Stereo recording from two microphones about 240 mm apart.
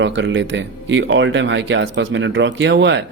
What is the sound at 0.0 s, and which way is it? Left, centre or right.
A man's voice, right.